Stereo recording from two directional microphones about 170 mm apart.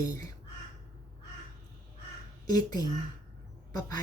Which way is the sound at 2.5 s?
20° left (ahead or behind).